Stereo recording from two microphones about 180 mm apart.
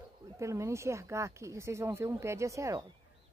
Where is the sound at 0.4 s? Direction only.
15° right (ahead or behind).